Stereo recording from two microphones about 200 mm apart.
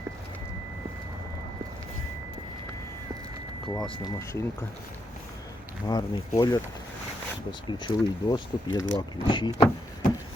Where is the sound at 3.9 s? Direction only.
15° left (ahead or behind).